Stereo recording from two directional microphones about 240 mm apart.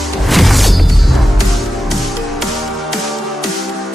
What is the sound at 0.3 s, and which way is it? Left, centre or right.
Music, centre.